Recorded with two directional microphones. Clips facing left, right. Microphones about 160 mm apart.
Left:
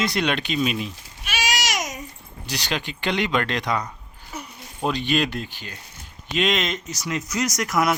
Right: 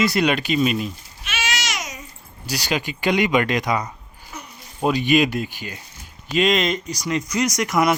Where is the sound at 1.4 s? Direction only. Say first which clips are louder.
Left 2 dB; 40° left (ahead or behind).